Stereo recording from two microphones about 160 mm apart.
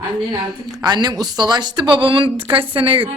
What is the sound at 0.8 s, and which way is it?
A woman's voice, 25° right (ahead or behind).